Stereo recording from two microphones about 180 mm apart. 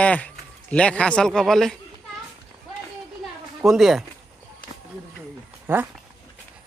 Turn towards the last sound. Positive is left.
turn(degrees=-10)  # may be behind; listen again after turning